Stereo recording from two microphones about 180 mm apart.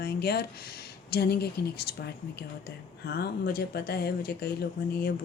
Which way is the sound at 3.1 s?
60° left (ahead or behind).